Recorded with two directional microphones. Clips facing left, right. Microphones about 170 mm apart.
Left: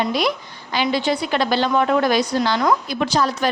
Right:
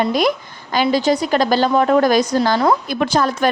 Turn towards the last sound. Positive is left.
turn(degrees=-50)  # may be behind; listen again after turning